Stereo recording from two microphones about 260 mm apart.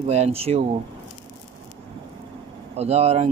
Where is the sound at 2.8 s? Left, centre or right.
Right.